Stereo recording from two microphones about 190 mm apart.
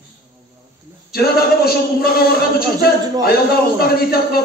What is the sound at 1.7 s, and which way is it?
Speech, 55° left (ahead or behind).